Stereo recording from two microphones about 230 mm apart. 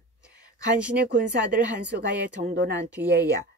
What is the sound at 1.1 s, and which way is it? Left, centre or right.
Speech, right.